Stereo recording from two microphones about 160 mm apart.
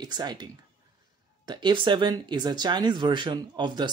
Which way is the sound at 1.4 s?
30° right (ahead or behind).